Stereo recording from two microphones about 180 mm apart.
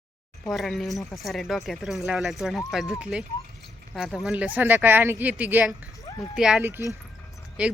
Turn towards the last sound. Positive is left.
turn(degrees=-5)  # may be behind; listen again after turning